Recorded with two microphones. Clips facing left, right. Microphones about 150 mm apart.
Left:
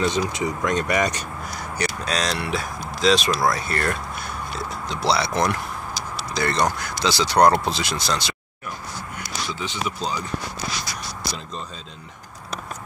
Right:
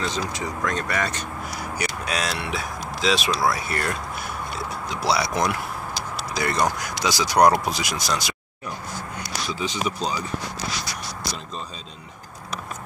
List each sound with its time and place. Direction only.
0.0 s speech: 20° left (ahead or behind)
1.8 s speech: 10° right (ahead or behind)
9.6 s speech: 15° right (ahead or behind)